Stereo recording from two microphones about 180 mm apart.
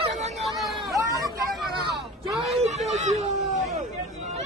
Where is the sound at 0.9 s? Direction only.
15° right (ahead or behind).